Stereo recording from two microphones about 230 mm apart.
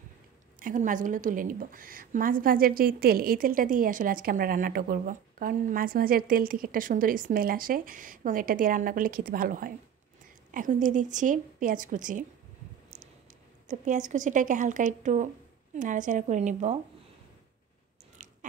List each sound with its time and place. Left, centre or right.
0.6 s a woman's voice: right
13.7 s a woman's voice: right
18.1 s a sound: right